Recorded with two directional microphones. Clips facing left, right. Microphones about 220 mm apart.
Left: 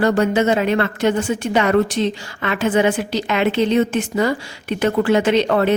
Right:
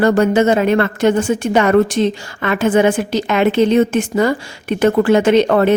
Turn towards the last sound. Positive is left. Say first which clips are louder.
# right 4 dB
turn(degrees=-50)  # may be behind; listen again after turning